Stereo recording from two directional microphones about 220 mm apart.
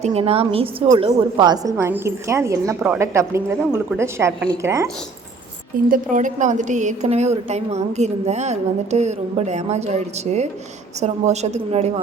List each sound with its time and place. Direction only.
0.0 s a woman's voice: 25° right (ahead or behind)
5.9 s a woman's voice: 35° right (ahead or behind)